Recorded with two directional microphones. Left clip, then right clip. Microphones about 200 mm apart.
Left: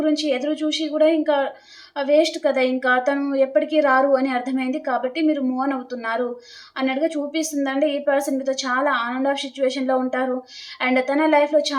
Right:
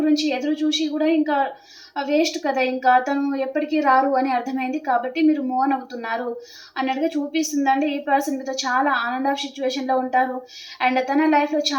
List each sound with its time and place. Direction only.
0.0 s a woman's voice: 20° left (ahead or behind)